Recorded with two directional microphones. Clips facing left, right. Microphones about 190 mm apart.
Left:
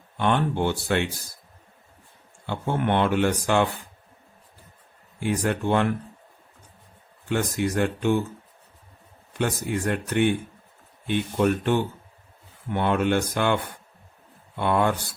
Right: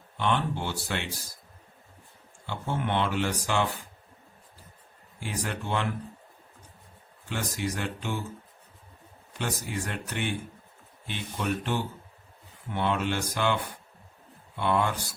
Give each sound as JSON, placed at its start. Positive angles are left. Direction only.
{"t": 0.2, "sound": "speech", "side_deg": 55}
{"t": 2.5, "sound": "speech", "side_deg": 55}
{"t": 5.2, "sound": "speech", "side_deg": 55}
{"t": 7.3, "sound": "speech", "side_deg": 55}
{"t": 9.4, "sound": "speech", "side_deg": 55}